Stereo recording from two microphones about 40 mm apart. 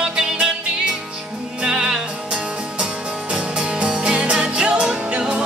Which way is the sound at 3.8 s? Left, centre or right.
Right.